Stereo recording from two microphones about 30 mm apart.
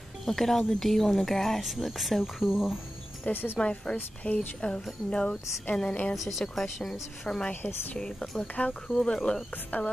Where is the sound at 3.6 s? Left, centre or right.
Left.